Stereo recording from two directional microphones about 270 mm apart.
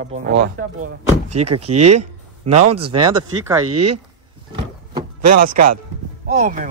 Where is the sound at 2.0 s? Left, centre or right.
Right.